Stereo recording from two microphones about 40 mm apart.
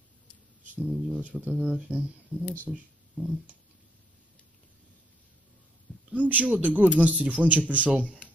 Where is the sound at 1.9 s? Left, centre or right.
Right.